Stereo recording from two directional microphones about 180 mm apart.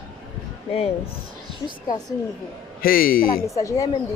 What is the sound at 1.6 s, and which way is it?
Speech, 20° left (ahead or behind).